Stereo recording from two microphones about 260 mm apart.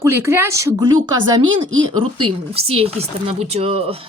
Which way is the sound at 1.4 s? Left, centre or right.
Right.